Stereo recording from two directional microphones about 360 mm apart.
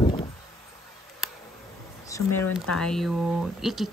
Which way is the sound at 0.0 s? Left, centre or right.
Centre.